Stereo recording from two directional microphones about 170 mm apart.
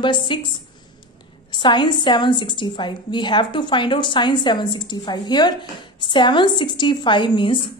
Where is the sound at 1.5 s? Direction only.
25° left (ahead or behind).